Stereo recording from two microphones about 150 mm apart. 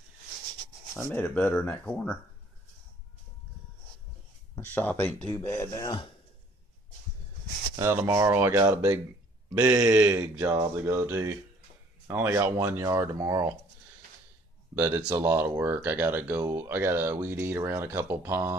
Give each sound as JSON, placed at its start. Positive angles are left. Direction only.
{"t": 1.1, "sound": "speech", "side_deg": 15}
{"t": 4.6, "sound": "speech", "side_deg": 10}
{"t": 7.7, "sound": "speech", "side_deg": -20}
{"t": 15.1, "sound": "speech", "side_deg": -20}